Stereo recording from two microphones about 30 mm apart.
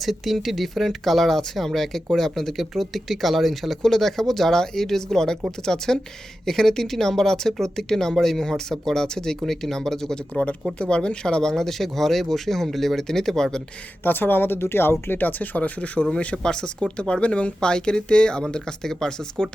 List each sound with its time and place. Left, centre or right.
0.0 s speech: centre
10.8 s speech: left
11.5 s speech: centre
14.0 s speech: left
15.2 s speech: left
16.1 s speech: left
16.4 s speech: left
16.8 s speech: left
17.6 s speech: left
18.5 s speech: left